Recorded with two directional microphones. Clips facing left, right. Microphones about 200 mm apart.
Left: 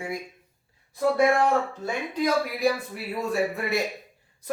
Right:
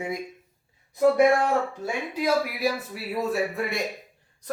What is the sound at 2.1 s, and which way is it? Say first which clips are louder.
A man's voice: even; 5° right (ahead or behind).